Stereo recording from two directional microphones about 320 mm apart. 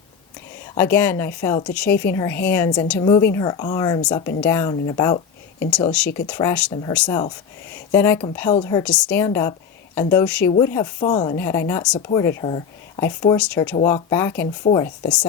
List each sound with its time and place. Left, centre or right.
0.8 s speech: centre